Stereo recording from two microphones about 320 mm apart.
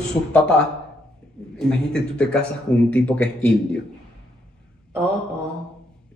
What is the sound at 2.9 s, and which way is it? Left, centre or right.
Speech, centre.